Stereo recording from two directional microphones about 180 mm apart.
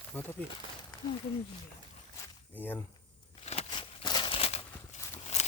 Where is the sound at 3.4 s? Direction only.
30° left (ahead or behind).